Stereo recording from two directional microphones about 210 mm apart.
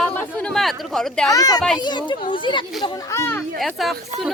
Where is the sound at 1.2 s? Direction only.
15° left (ahead or behind).